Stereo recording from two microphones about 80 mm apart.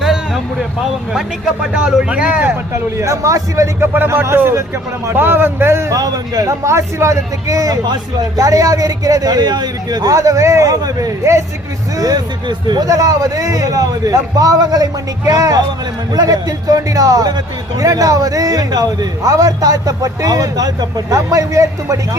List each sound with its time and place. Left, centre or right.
1.8 s speech: centre
3.0 s speech: right
3.9 s a man's voice: right
6.0 s speech: right
6.5 s speech: right
12.5 s speech: right